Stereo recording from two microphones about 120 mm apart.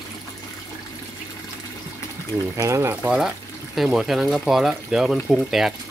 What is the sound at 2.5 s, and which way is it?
Speech, 25° right (ahead or behind).